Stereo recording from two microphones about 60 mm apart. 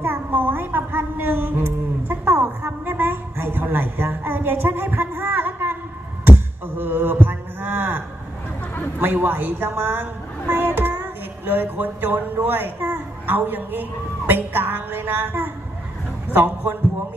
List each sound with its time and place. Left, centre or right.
0.0 s child singing: right
6.8 s a sound: right
9.0 s a woman's voice: right
10.5 s child singing: right
16.3 s a woman's voice: right